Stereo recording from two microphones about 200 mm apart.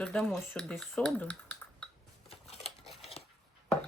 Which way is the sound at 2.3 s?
30° left (ahead or behind).